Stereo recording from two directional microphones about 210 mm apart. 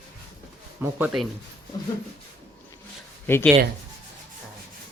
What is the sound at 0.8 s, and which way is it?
Speech, 5° right (ahead or behind).